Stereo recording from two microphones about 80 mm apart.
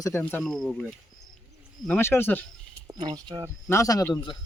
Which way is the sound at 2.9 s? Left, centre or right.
Right.